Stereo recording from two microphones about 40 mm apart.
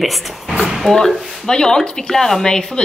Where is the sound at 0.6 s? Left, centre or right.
Centre.